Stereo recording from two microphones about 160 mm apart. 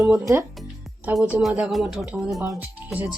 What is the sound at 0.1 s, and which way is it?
Speech, 20° right (ahead or behind).